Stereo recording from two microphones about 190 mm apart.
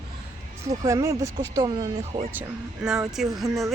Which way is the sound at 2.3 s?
5° right (ahead or behind).